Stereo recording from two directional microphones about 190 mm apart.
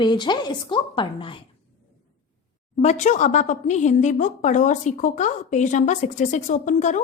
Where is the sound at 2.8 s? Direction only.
40° left (ahead or behind).